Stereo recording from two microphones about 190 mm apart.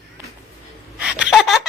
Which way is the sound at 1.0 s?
5° right (ahead or behind).